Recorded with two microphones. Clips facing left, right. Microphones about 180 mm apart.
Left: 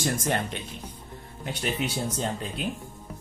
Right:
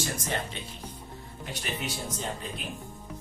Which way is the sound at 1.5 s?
60° left (ahead or behind).